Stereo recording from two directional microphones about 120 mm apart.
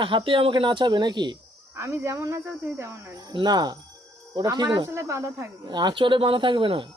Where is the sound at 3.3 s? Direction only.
35° right (ahead or behind).